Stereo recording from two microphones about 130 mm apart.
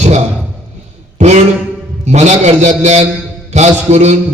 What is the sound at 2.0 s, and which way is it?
Mantra, 60° right (ahead or behind).